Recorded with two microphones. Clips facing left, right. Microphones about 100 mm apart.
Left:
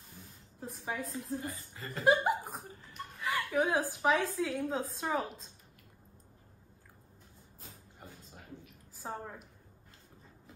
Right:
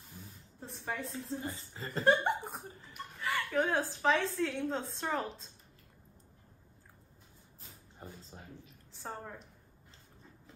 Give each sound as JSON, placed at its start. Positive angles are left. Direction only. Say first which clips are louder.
{"t": 0.6, "sound": "a woman's voice", "louder": "left 1 dB", "side_deg": 5}
{"t": 1.3, "sound": "a woman's voice", "louder": "left 1 dB", "side_deg": -25}
{"t": 2.0, "sound": "a woman's voice", "louder": "left 1 dB", "side_deg": 5}
{"t": 8.9, "sound": "a woman's voice", "louder": "left 2 dB", "side_deg": 5}